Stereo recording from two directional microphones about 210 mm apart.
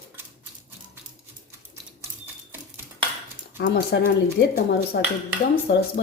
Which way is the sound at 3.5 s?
50° left (ahead or behind).